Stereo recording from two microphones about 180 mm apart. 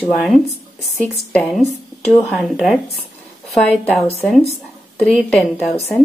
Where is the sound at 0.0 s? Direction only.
Centre (ahead or behind).